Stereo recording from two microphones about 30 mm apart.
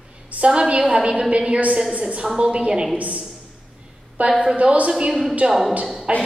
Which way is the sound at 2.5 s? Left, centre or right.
Right.